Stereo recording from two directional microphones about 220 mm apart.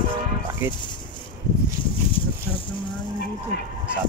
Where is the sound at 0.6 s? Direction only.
10° right (ahead or behind).